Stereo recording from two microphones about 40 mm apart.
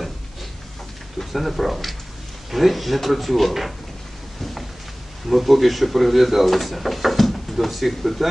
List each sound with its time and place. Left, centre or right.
1.3 s speech: centre
5.3 s speech: centre